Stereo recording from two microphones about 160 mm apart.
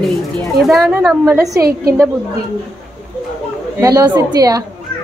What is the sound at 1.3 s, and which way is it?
Speech, 20° right (ahead or behind).